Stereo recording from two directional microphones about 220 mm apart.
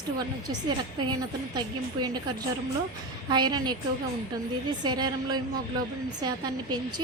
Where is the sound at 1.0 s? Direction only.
20° right (ahead or behind).